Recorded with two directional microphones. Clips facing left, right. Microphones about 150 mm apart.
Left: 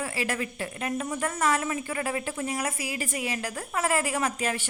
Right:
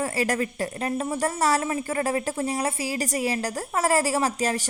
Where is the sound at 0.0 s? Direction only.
40° right (ahead or behind).